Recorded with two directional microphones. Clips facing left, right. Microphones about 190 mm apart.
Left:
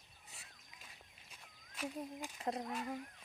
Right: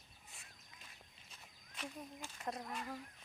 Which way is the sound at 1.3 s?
10° left (ahead or behind).